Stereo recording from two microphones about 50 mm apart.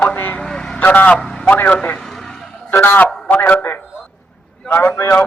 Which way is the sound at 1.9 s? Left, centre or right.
Centre.